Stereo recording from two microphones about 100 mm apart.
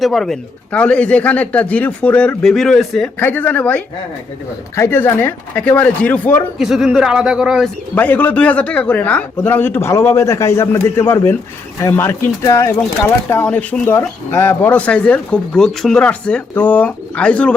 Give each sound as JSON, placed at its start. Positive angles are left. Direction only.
{"t": 0.0, "sound": "speech", "side_deg": 5}
{"t": 3.2, "sound": "a man's voice", "side_deg": 20}
{"t": 6.6, "sound": "speech", "side_deg": -5}
{"t": 7.9, "sound": "a man's voice", "side_deg": 15}
{"t": 13.4, "sound": "speech", "side_deg": 15}
{"t": 13.9, "sound": "speech", "side_deg": 25}